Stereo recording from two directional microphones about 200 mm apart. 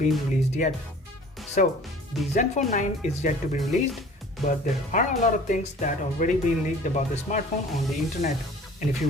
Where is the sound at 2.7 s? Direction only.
40° left (ahead or behind).